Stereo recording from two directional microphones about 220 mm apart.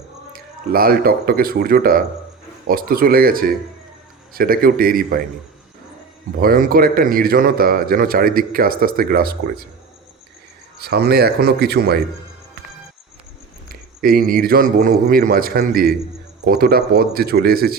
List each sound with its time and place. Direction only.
0.3 s speech: 40° right (ahead or behind)
6.4 s speech: 40° right (ahead or behind)
10.8 s speech: 45° right (ahead or behind)
13.7 s speech: 40° right (ahead or behind)